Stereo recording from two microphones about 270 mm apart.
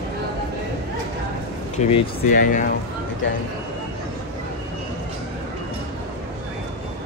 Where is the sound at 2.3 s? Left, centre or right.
Left.